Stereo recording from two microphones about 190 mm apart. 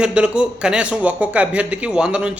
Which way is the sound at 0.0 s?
5° right (ahead or behind).